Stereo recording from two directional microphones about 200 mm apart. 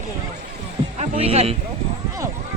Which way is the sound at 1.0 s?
30° right (ahead or behind).